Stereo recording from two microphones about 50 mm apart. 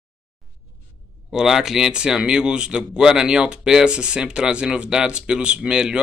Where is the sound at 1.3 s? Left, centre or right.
Centre.